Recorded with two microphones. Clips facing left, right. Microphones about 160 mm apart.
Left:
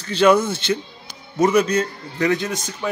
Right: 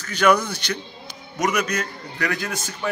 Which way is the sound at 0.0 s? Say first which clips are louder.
Left 4 dB; 30° left (ahead or behind).